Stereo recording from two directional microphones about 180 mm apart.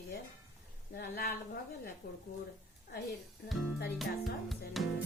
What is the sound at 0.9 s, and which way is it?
Speech, 60° left (ahead or behind).